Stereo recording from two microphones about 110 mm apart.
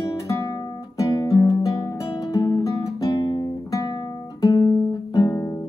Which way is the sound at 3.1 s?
45° left (ahead or behind).